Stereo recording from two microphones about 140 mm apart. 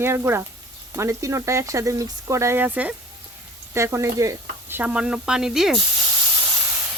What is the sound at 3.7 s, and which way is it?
Stir, 20° right (ahead or behind).